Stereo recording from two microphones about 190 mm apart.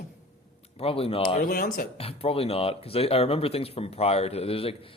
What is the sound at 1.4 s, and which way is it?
Speech, 50° left (ahead or behind).